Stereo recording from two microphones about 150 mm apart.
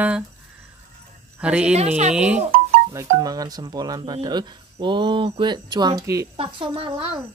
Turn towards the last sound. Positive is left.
turn(degrees=-35)  # may be behind; listen again after turning